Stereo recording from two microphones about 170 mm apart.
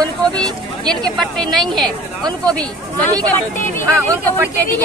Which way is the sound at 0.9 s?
5° left (ahead or behind).